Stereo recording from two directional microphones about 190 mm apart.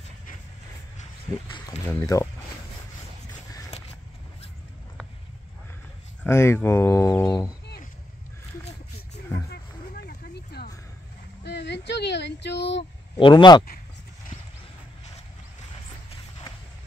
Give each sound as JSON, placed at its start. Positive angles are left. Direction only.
{"t": 1.7, "sound": "speech", "side_deg": 10}
{"t": 6.2, "sound": "speech", "side_deg": 15}
{"t": 10.0, "sound": "a sound", "side_deg": 55}
{"t": 11.4, "sound": "speech", "side_deg": 65}
{"t": 13.2, "sound": "speech", "side_deg": 25}